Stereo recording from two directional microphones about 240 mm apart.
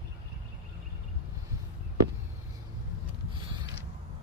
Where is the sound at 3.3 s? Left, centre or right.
Centre.